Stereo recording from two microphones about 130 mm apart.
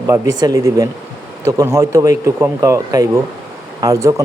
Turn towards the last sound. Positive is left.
turn(degrees=-25)  # may be behind; listen again after turning